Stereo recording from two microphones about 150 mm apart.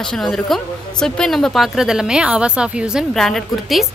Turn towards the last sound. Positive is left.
turn(degrees=0)  # may be behind; listen again after turning